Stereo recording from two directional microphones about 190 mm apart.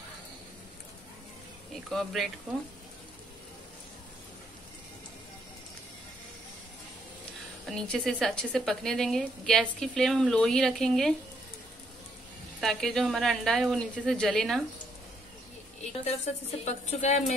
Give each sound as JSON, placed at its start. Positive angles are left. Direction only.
{"t": 1.9, "sound": "a woman's voice", "side_deg": 0}
{"t": 7.6, "sound": "a woman's voice", "side_deg": 5}
{"t": 12.5, "sound": "a woman's voice", "side_deg": 0}
{"t": 16.6, "sound": "a woman's voice", "side_deg": 35}